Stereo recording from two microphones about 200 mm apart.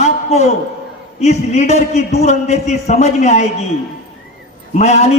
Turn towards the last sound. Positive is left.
turn(degrees=35)  # may be behind; listen again after turning